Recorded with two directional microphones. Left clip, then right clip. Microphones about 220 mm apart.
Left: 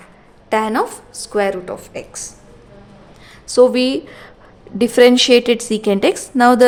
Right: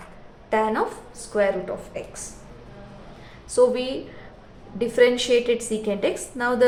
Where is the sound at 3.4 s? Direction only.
55° left (ahead or behind).